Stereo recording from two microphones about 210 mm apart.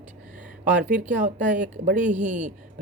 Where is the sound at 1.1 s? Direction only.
35° right (ahead or behind).